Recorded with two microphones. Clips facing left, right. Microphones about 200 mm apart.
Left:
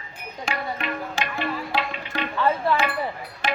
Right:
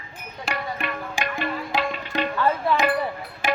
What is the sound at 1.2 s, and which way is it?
Music, 15° right (ahead or behind).